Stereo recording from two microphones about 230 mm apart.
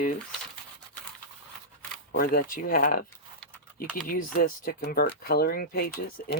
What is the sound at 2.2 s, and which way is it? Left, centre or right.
Speech, left.